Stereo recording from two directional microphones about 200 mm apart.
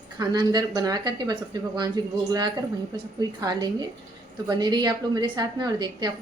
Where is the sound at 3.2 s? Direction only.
20° right (ahead or behind).